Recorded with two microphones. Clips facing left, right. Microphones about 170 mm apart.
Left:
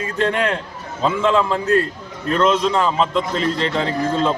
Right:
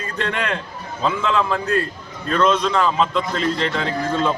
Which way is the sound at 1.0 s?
25° left (ahead or behind).